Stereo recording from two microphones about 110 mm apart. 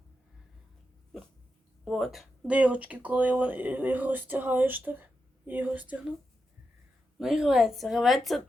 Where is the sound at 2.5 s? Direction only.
10° right (ahead or behind).